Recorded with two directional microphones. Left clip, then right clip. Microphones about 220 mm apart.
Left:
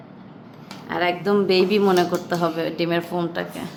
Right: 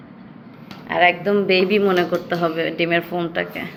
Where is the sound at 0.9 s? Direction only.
15° left (ahead or behind).